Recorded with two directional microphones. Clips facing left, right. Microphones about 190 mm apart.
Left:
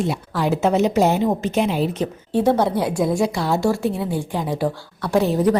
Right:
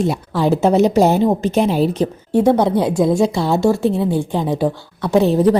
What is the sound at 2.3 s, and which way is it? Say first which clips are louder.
A woman's voice: right 4 dB; 15° right (ahead or behind).